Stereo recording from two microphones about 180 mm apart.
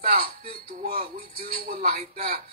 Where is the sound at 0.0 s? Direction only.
55° right (ahead or behind).